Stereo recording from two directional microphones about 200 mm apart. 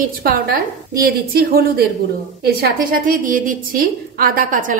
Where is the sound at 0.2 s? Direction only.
50° right (ahead or behind).